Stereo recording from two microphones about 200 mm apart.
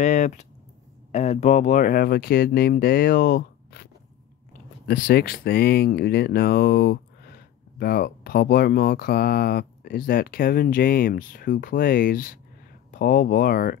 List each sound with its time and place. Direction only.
0.0 s speech: 35° left (ahead or behind)